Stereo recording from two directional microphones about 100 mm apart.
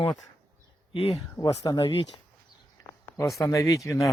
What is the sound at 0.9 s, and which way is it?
Speech, 70° left (ahead or behind).